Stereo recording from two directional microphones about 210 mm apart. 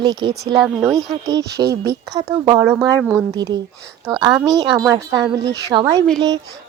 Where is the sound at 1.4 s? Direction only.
50° right (ahead or behind).